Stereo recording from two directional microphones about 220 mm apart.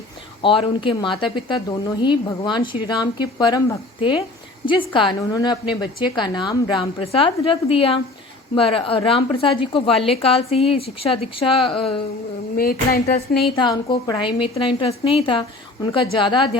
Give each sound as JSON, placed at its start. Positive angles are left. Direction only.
{"t": 0.4, "sound": "a woman's voice", "side_deg": 25}
{"t": 12.5, "sound": "speech", "side_deg": 40}
{"t": 13.6, "sound": "a woman's voice", "side_deg": 20}